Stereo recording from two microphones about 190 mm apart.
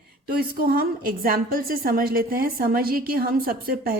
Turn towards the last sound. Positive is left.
turn(degrees=-50)  # may be behind; listen again after turning